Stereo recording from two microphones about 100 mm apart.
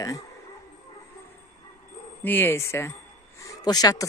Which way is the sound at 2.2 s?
20° left (ahead or behind).